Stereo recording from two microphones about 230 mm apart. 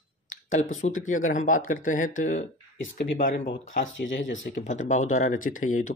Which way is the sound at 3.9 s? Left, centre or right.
Left.